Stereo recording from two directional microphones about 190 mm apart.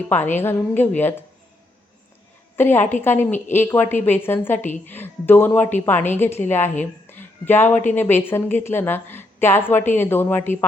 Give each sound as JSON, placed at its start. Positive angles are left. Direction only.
{"t": 0.1, "sound": "a woman's voice", "side_deg": 10}
{"t": 2.6, "sound": "a woman's voice", "side_deg": 10}
{"t": 7.1, "sound": "a sound", "side_deg": 10}
{"t": 7.9, "sound": "a woman's voice", "side_deg": 10}